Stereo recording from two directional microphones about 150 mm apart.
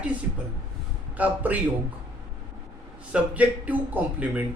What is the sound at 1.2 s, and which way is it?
Speech, 10° right (ahead or behind).